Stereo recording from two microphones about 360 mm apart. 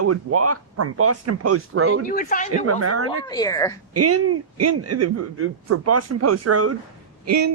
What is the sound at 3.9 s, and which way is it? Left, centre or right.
Speech, right.